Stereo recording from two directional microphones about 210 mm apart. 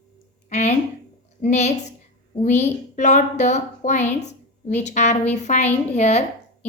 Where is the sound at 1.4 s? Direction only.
35° left (ahead or behind).